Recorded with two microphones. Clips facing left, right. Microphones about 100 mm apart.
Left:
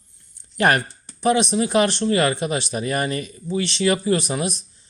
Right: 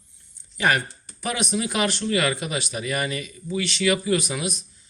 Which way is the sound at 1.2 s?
25° left (ahead or behind).